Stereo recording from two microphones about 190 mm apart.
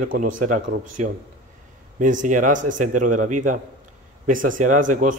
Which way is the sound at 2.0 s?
45° right (ahead or behind).